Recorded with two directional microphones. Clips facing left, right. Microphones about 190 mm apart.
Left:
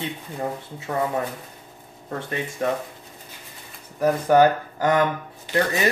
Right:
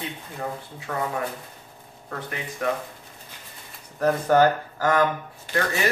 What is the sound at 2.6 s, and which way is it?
Speech, 25° left (ahead or behind).